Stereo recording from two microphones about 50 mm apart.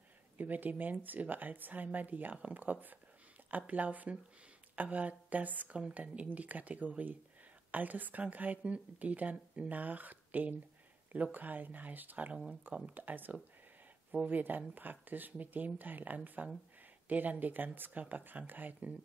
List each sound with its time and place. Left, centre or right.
0.4 s speech: right
5.8 s speech: right